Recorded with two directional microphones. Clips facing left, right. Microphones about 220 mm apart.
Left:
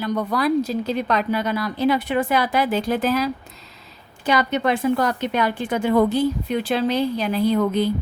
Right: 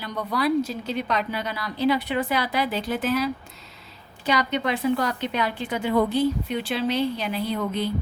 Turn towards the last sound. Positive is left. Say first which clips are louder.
# left 7 dB
turn(degrees=40)  # may be behind; listen again after turning